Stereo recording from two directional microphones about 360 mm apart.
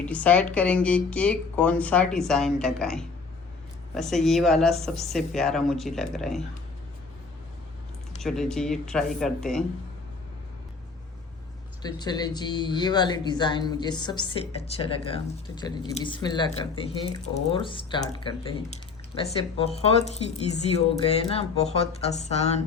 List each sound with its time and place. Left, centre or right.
0.0 s speech: centre
8.2 s speech: centre
11.8 s speech: centre